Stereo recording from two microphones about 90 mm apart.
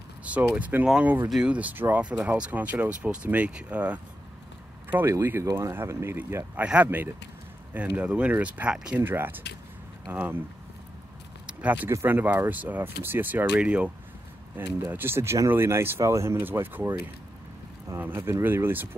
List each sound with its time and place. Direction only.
0.2 s speech: 15° right (ahead or behind)
4.8 s a sound: 20° right (ahead or behind)
5.1 s speech: 30° right (ahead or behind)
11.4 s vehicle: 15° right (ahead or behind)
11.9 s speech: 25° right (ahead or behind)
17.9 s speech: 25° right (ahead or behind)